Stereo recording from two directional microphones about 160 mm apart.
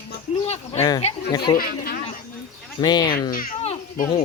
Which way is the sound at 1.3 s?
25° left (ahead or behind).